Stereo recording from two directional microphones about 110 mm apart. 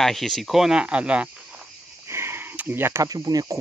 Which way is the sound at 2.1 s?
20° right (ahead or behind).